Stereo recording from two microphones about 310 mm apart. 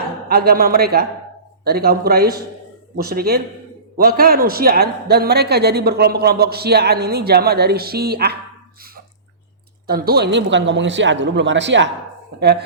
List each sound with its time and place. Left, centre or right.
0.3 s a man's voice: right
9.8 s a man's voice: right